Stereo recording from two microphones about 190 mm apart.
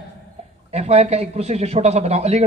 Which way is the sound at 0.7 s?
35° right (ahead or behind).